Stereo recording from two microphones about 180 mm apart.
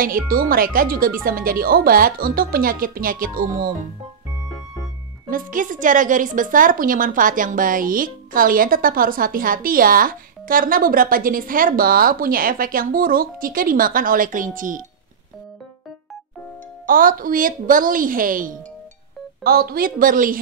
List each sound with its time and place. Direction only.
0.0 s a woman's voice: 55° right (ahead or behind)
5.3 s a woman's voice: 50° right (ahead or behind)
16.8 s a woman's voice: 50° right (ahead or behind)